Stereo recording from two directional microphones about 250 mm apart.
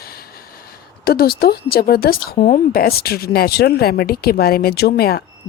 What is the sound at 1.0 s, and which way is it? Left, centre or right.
Speech, left.